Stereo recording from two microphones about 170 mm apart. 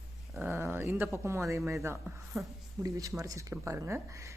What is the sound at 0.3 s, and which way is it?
Speech, 15° right (ahead or behind).